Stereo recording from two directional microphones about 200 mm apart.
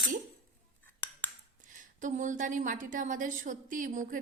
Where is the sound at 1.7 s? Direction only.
40° right (ahead or behind).